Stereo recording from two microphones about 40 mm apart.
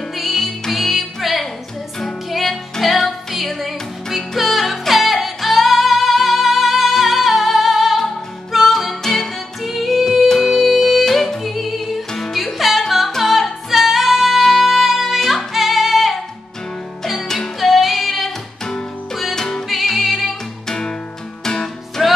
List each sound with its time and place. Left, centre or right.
0.2 s music: centre
17.6 s music: centre
19.3 s music: centre
19.7 s music: centre
20.6 s music: centre